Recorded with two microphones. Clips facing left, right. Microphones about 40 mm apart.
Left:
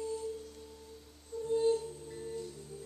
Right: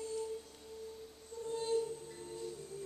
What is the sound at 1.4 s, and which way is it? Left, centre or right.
Music, centre.